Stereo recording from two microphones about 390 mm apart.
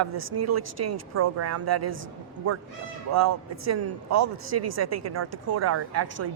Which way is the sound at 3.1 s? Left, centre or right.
Right.